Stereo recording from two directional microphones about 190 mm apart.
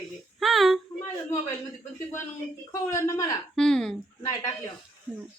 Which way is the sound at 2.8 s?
15° left (ahead or behind).